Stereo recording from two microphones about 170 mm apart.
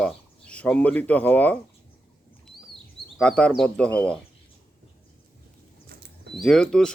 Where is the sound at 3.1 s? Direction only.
5° left (ahead or behind).